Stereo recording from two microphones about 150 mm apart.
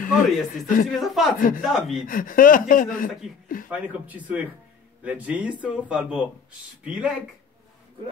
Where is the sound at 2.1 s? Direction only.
65° left (ahead or behind).